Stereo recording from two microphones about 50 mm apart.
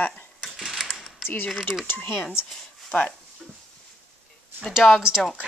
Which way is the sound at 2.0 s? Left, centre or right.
Centre.